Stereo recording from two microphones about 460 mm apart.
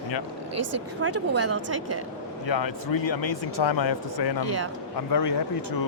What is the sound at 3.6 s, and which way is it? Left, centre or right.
Speech, left.